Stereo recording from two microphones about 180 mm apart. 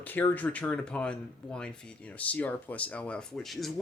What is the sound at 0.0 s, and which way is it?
Speech, 10° left (ahead or behind).